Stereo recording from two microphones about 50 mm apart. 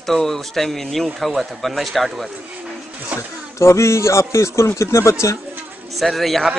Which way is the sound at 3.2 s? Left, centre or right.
Left.